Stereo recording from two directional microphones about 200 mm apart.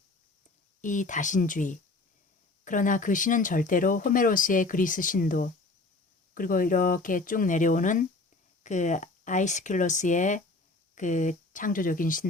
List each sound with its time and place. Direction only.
0.8 s speech: 40° left (ahead or behind)